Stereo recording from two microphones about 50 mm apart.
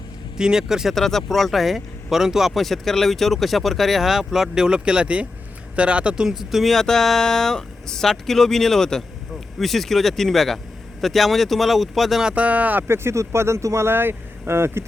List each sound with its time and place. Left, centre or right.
0.3 s speech: centre
0.9 s speech: centre; by 6.2 s right
6.2 s speech: centre
12.3 s speech: right
12.9 s speech: right
13.8 s speech: right